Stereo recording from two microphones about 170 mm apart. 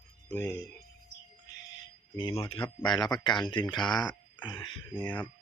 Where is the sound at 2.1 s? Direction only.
25° left (ahead or behind).